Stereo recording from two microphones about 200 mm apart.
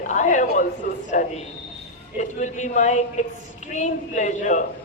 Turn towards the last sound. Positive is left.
turn(degrees=40)  # may be behind; listen again after turning